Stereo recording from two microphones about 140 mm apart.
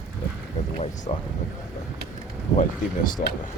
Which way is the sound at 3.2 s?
65° left (ahead or behind).